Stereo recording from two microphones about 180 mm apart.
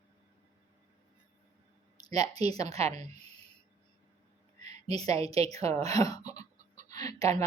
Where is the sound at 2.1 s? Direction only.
35° right (ahead or behind).